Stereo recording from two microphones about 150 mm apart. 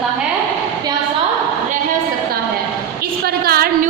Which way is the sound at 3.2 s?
90° right.